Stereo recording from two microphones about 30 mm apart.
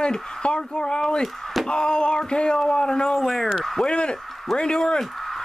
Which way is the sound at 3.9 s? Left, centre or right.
Left.